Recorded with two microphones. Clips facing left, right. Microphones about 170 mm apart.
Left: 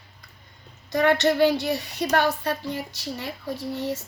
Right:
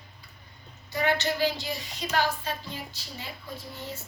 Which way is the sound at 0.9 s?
70° left (ahead or behind).